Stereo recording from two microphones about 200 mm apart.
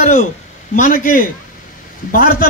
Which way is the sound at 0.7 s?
40° left (ahead or behind).